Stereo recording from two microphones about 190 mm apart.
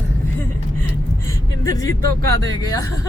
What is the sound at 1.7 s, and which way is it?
Speech, 15° left (ahead or behind).